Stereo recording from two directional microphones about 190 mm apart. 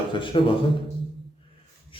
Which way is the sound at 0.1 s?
25° left (ahead or behind).